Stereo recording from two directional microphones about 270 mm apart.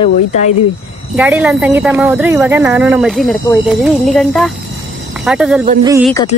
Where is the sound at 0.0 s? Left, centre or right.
Left.